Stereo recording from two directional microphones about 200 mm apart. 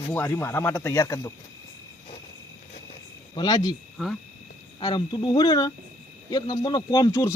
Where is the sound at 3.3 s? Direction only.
20° left (ahead or behind).